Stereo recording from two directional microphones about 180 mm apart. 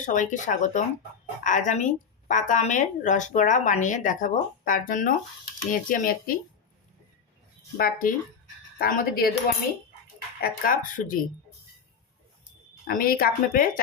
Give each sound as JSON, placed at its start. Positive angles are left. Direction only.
{"t": 0.0, "sound": "a woman's voice", "side_deg": 45}
{"t": 7.8, "sound": "a woman's voice", "side_deg": 55}
{"t": 10.4, "sound": "a woman's voice", "side_deg": 50}
{"t": 12.9, "sound": "speech", "side_deg": 55}